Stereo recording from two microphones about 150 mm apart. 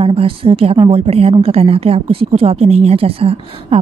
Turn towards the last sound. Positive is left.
turn(degrees=-40)  # may be behind; listen again after turning